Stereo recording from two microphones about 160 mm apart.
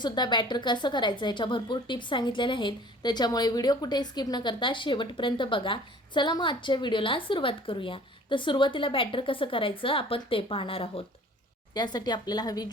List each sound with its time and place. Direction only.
0.0 s a woman's voice: 30° left (ahead or behind)